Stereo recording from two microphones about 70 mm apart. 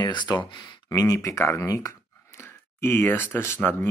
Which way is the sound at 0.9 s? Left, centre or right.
Left.